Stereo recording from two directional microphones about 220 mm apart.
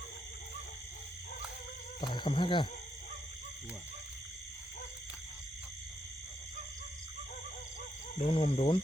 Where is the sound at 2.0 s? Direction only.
20° left (ahead or behind).